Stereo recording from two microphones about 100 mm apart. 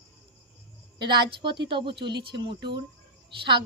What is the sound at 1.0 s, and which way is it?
A child's voice, 50° right (ahead or behind).